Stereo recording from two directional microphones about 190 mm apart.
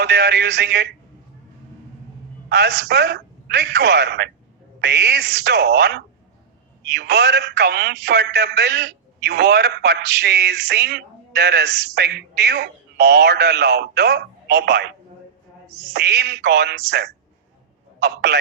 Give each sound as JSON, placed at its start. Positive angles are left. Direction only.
{"t": 0.0, "sound": "speech", "side_deg": -60}
{"t": 2.5, "sound": "speech", "side_deg": -60}